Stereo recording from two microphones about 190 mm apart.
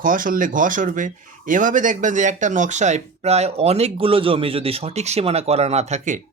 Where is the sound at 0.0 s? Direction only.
45° right (ahead or behind).